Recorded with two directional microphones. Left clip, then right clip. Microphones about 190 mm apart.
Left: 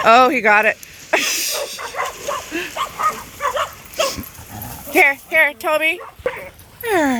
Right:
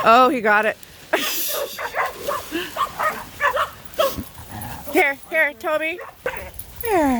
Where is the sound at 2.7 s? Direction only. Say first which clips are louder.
Right 3 dB; 50° right (ahead or behind).